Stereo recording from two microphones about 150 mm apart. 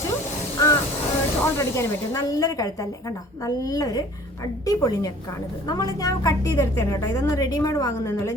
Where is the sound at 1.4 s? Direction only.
20° left (ahead or behind).